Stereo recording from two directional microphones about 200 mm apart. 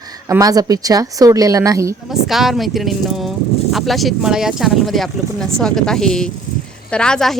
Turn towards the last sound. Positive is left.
turn(degrees=5)  # may be behind; listen again after turning